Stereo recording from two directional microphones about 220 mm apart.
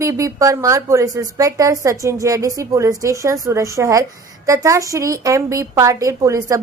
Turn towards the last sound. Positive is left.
turn(degrees=-15)  # may be behind; listen again after turning